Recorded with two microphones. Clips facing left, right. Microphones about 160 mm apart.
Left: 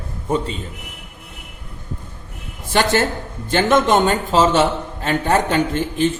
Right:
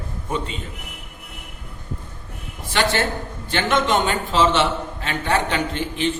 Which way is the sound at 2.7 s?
45° left (ahead or behind).